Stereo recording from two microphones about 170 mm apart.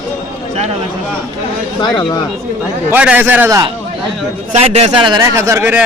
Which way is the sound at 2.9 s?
10° right (ahead or behind).